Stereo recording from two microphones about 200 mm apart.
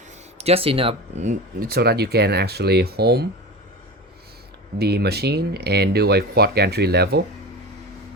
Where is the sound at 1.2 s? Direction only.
50° right (ahead or behind).